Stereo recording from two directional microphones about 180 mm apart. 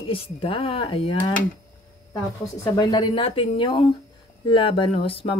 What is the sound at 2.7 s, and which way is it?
Speech, 25° left (ahead or behind).